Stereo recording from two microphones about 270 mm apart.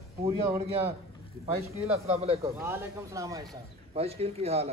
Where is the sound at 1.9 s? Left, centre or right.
Right.